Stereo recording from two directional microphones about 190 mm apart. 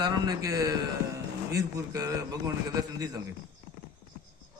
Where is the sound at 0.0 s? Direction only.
20° right (ahead or behind).